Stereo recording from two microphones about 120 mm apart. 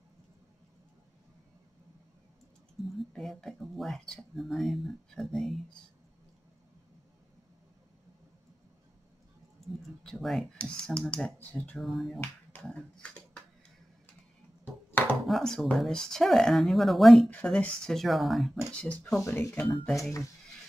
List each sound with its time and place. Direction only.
3.0 s speech: centre (ahead or behind)
9.8 s speech: centre (ahead or behind)
14.6 s a sound: 15° left (ahead or behind)
15.0 s speech: centre (ahead or behind)
19.2 s speech: 20° left (ahead or behind)